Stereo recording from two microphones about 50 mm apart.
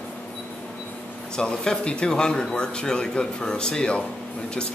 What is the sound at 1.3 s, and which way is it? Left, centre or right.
Speech, centre.